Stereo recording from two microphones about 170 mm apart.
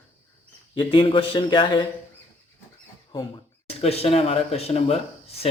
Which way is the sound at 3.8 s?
35° left (ahead or behind).